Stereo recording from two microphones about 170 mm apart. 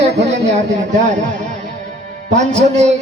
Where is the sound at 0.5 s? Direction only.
45° right (ahead or behind).